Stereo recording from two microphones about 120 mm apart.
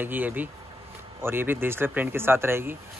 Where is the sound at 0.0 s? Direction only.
15° right (ahead or behind).